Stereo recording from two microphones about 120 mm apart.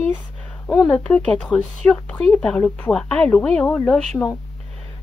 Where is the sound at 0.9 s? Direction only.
10° left (ahead or behind).